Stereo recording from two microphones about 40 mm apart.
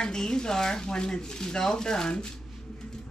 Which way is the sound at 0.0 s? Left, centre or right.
Centre.